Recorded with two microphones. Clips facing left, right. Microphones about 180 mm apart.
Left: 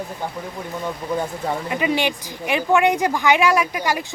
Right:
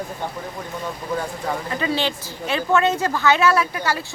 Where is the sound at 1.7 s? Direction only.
15° left (ahead or behind).